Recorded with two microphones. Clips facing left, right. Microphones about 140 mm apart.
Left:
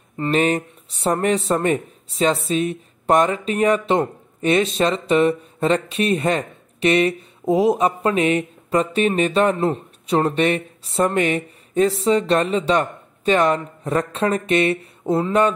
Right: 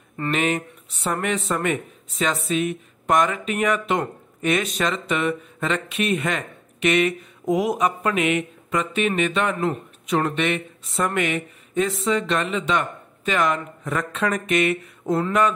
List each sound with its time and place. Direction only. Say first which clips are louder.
0.3 s speech: left 4 dB; 35° left (ahead or behind)